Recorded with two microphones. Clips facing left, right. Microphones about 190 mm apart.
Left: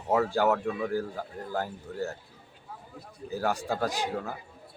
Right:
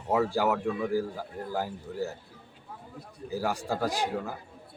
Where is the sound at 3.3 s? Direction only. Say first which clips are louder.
Left 1 dB; 10° right (ahead or behind).